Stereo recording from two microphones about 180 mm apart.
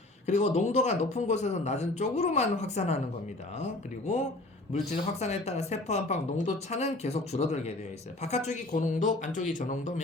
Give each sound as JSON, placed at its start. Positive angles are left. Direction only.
{"t": 0.3, "sound": "speech", "side_deg": 40}